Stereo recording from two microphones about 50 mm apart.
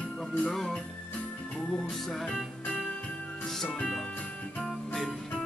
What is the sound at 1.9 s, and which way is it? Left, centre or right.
Music, centre.